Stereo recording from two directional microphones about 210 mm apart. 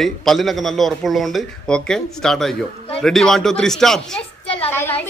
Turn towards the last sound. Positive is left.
turn(degrees=10)  # may be behind; listen again after turning